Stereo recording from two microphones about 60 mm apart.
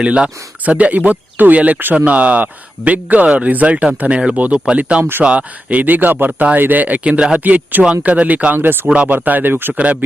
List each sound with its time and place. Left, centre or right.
0.0 s speech: centre
8.5 s speech: right
8.9 s speech: right
9.7 s speech: right